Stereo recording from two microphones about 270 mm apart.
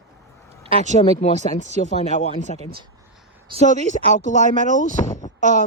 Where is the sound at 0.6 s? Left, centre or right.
Right.